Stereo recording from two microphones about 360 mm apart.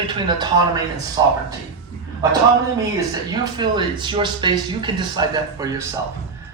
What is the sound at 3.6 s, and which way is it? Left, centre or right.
A man's voice, centre.